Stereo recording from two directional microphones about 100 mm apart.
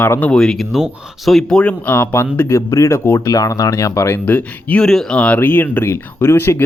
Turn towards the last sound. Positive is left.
turn(degrees=25)  # may be behind; listen again after turning